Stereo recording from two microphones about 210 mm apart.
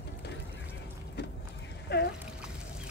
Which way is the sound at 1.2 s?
50° left (ahead or behind).